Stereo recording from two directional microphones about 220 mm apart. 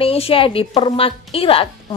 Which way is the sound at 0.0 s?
25° left (ahead or behind).